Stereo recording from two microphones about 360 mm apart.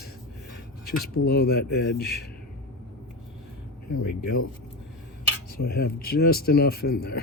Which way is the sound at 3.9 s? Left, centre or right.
Left.